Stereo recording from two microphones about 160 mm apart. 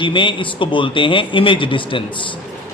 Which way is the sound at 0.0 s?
30° left (ahead or behind).